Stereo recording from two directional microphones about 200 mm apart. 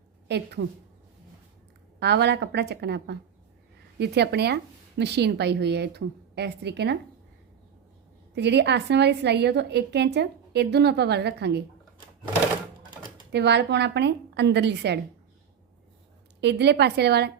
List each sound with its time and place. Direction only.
0.3 s a woman's voice: 55° right (ahead or behind)
2.0 s a woman's voice: 55° right (ahead or behind)
8.4 s a woman's voice: 60° right (ahead or behind)
13.3 s a woman's voice: 60° right (ahead or behind)
16.4 s a woman's voice: 55° right (ahead or behind)